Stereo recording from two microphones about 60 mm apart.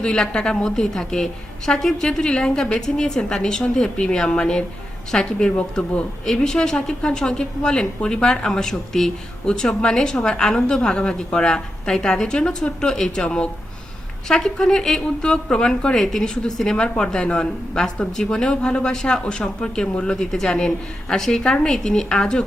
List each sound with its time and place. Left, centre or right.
0.0 s a woman's voice: centre
16.0 s a woman's voice: centre